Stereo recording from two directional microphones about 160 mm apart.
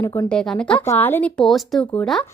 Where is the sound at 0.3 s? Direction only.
5° left (ahead or behind).